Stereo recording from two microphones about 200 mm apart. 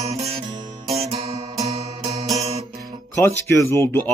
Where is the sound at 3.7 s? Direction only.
10° left (ahead or behind).